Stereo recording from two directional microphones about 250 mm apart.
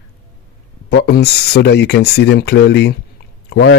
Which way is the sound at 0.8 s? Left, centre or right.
Left.